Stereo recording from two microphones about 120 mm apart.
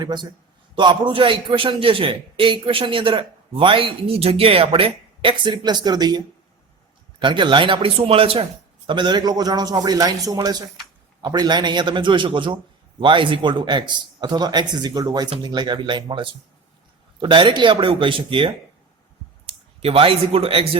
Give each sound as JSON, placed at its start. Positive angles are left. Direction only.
{"t": 0.0, "sound": "a man's voice", "side_deg": -35}
{"t": 8.9, "sound": "a man's voice", "side_deg": -40}